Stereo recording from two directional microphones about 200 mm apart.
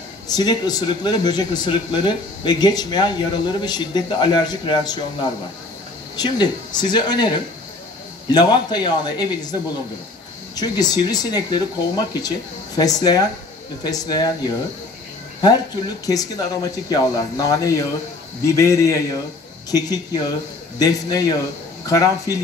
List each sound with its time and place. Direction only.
0.3 s speech: 20° left (ahead or behind)
6.1 s speech: 20° left (ahead or behind)
20.8 s speech: 20° left (ahead or behind)